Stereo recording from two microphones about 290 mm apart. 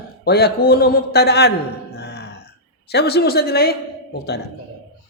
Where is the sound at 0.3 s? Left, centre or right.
Left.